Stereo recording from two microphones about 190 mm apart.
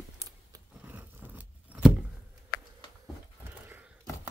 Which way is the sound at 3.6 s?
10° right (ahead or behind).